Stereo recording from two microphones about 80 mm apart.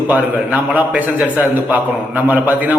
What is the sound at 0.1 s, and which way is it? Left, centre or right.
A man's voice, centre.